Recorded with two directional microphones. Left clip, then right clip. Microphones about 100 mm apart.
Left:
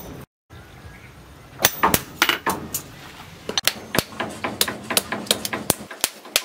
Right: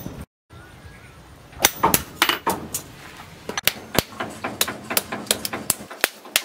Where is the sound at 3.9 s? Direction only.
20° left (ahead or behind).